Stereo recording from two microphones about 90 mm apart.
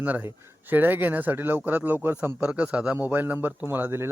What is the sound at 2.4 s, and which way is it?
Speech, 10° right (ahead or behind).